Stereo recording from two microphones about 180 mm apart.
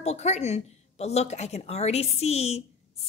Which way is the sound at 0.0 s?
40° left (ahead or behind).